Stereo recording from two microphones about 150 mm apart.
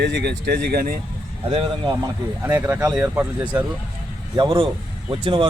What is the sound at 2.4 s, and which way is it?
Speech, 15° right (ahead or behind).